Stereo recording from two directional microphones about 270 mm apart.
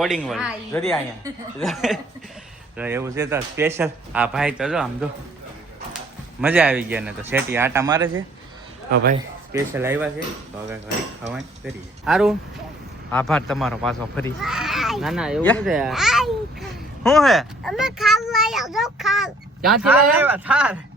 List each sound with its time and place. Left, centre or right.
0.0 s speech: centre
6.4 s speech: centre
8.9 s a man's voice: right
9.5 s speech: centre
11.3 s speech: centre